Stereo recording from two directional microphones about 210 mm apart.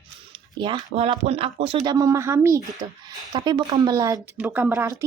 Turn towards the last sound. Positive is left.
turn(degrees=-15)  # may be behind; listen again after turning